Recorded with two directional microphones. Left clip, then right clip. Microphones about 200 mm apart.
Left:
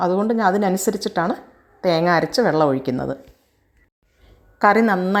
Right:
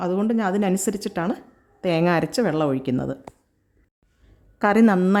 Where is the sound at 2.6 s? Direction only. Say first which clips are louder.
Left 5 dB; 30° right (ahead or behind).